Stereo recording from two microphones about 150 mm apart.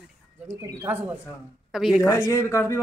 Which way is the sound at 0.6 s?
20° right (ahead or behind).